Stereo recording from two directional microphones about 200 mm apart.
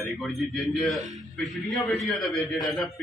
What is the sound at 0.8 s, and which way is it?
A man's voice, centre (ahead or behind).